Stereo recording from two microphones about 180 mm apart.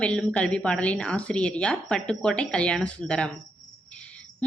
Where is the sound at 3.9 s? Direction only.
5° left (ahead or behind).